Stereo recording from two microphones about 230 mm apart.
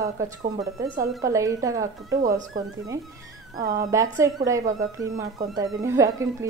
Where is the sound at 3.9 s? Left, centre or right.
Centre.